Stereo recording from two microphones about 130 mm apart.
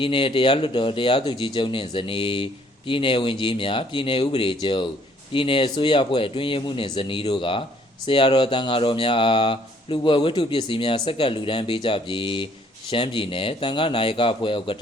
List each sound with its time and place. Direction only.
0.0 s speech: 40° left (ahead or behind)